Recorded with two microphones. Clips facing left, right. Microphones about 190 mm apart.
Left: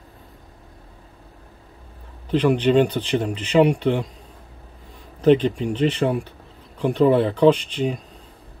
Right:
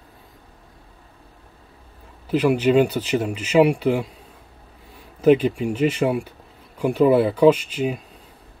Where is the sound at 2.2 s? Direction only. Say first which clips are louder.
Even; 5° right (ahead or behind).